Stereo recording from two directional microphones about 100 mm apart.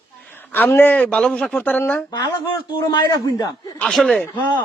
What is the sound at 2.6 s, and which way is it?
A man's voice, 50° left (ahead or behind).